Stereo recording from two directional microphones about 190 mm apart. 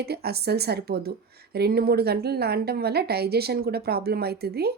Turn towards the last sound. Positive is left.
turn(degrees=-55)  # may be behind; listen again after turning